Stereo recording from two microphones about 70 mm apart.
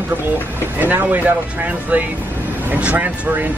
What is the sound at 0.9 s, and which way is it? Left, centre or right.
A man's voice, right.